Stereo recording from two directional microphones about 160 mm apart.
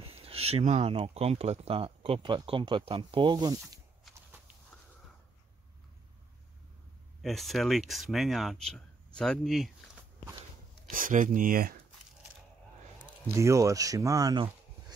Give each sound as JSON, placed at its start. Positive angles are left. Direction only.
{"t": 0.1, "sound": "speech", "side_deg": -35}
{"t": 4.1, "sound": "walk", "side_deg": -10}
{"t": 7.2, "sound": "speech", "side_deg": 0}
{"t": 10.9, "sound": "speech", "side_deg": -55}
{"t": 13.4, "sound": "speech", "side_deg": -20}